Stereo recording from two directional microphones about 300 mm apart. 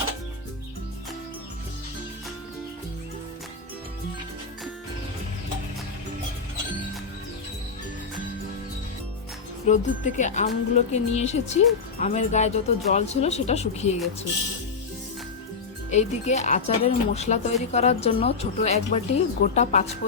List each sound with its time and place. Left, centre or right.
9.6 s speech: left
15.9 s speech: left